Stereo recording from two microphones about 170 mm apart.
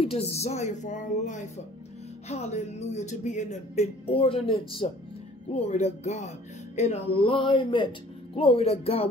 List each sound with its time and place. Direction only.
0.0 s speech: 35° left (ahead or behind)